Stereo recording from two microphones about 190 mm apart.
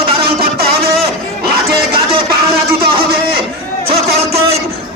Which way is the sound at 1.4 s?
55° right (ahead or behind).